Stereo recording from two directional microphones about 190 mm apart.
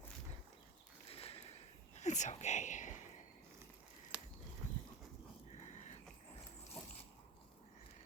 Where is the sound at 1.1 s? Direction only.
30° left (ahead or behind).